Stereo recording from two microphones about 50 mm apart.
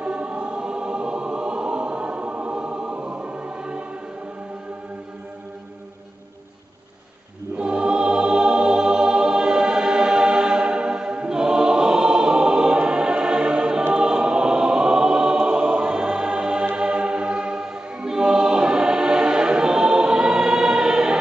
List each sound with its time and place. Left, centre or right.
0.0 s choir: right
7.5 s choir: centre